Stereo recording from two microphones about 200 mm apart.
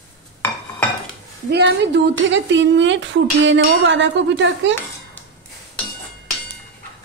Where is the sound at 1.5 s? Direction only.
60° right (ahead or behind).